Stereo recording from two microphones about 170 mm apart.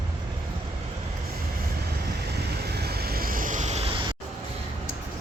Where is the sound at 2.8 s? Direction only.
70° right (ahead or behind); by 3.8 s 45° right (ahead or behind).